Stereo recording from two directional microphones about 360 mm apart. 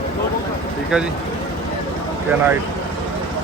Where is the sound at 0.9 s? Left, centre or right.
Centre.